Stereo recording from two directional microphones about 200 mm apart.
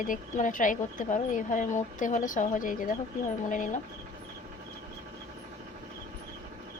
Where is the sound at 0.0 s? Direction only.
40° left (ahead or behind).